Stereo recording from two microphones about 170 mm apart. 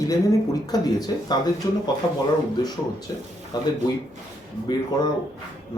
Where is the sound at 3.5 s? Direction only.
25° left (ahead or behind).